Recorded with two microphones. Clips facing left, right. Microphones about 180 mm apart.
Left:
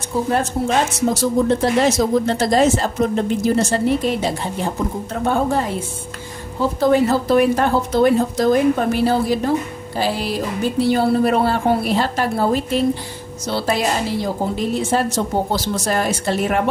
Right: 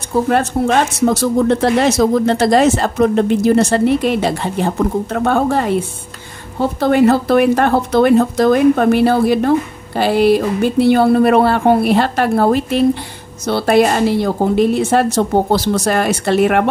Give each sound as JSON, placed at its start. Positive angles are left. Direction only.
{"t": 0.3, "sound": "a woman's voice", "side_deg": -70}